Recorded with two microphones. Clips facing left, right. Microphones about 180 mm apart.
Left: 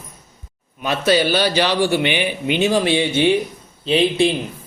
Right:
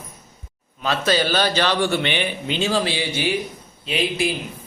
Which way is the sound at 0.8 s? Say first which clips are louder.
Left 3 dB; 15° left (ahead or behind).